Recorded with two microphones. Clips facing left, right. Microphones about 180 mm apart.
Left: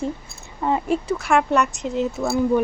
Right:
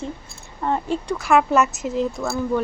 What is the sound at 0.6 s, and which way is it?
A woman's voice, 10° left (ahead or behind).